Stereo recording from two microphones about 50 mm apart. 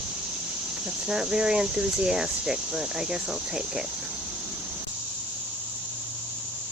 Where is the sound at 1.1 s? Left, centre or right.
Centre.